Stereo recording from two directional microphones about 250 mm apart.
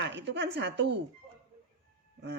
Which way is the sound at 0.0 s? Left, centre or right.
Right.